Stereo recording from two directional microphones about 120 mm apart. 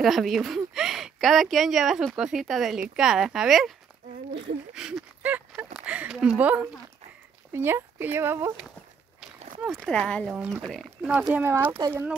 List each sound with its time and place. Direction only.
0.0 s speech: centre (ahead or behind)
4.7 s speech: 5° right (ahead or behind)
9.7 s speech: 5° left (ahead or behind)
10.3 s speech: 10° right (ahead or behind)
11.8 s speech: 30° right (ahead or behind)